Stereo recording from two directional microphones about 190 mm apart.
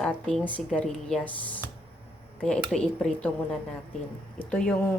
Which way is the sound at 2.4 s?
5° left (ahead or behind).